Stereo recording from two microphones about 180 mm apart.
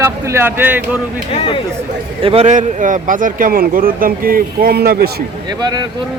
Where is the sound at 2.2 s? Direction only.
35° right (ahead or behind); by 5.0 s 60° right (ahead or behind).